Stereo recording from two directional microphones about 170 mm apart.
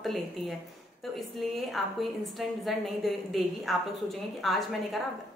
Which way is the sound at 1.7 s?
Centre (ahead or behind).